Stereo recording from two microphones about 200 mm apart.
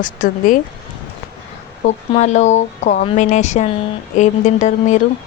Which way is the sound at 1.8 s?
35° left (ahead or behind).